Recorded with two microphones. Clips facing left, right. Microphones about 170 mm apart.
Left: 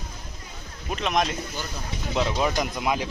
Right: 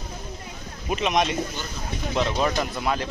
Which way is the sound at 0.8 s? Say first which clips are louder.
Right 2 dB; 5° right (ahead or behind).